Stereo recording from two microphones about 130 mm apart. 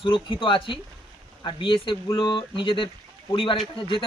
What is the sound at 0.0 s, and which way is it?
Speech, 40° left (ahead or behind).